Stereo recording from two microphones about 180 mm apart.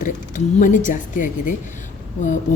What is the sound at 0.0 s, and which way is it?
Speech, 45° left (ahead or behind).